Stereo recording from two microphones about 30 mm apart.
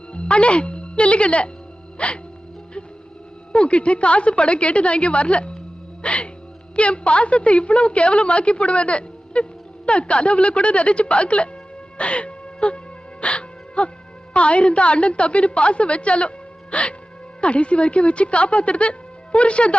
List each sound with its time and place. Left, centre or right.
0.1 s a woman's voice: left
3.5 s a woman's voice: left
11.9 s music: left
14.3 s a woman's voice: left